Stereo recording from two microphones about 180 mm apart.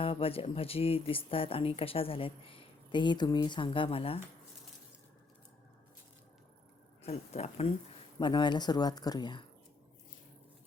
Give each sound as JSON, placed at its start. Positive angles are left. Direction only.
{"t": 0.0, "sound": "speech", "side_deg": 30}
{"t": 7.0, "sound": "speech", "side_deg": 35}